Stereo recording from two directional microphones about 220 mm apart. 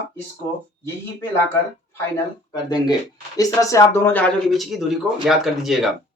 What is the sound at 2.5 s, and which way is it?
Speech, 20° left (ahead or behind).